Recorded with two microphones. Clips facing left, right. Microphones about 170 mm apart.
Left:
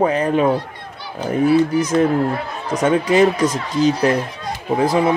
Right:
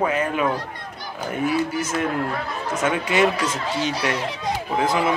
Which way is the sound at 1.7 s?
35° left (ahead or behind).